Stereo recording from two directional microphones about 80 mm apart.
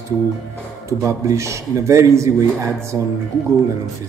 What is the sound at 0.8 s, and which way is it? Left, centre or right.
Speech, right.